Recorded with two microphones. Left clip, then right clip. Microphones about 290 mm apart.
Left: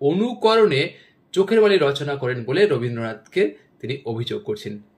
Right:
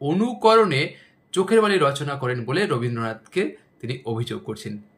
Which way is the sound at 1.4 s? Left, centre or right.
Right.